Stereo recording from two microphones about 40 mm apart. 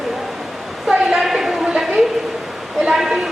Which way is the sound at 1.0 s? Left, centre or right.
Centre.